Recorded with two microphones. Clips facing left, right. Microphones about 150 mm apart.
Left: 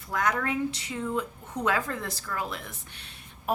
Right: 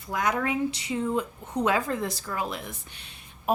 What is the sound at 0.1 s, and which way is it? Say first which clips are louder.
A woman's voice: right 1 dB; 15° right (ahead or behind).